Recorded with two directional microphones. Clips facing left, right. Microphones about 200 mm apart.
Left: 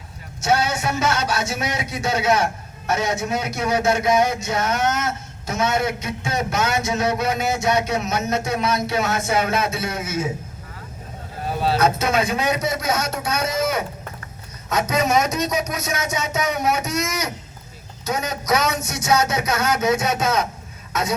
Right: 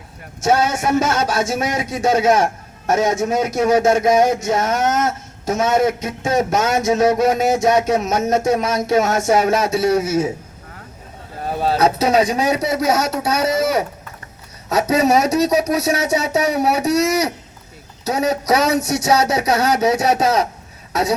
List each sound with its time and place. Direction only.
0.4 s a man's voice: 45° right (ahead or behind)
11.4 s speech: 45° right (ahead or behind)